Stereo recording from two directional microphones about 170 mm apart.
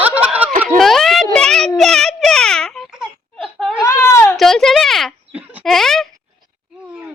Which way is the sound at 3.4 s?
Centre (ahead or behind).